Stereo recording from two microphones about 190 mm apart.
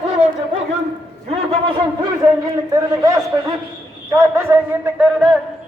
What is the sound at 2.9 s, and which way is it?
A man's voice, 15° right (ahead or behind).